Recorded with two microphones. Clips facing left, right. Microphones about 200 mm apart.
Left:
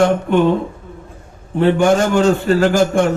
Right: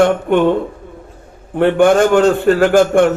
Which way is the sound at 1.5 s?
55° right (ahead or behind).